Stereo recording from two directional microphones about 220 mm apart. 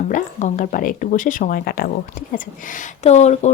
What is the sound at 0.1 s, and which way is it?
Speech, 35° left (ahead or behind).